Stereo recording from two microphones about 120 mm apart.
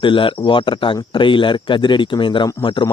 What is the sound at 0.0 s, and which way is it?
A man's voice, 45° left (ahead or behind).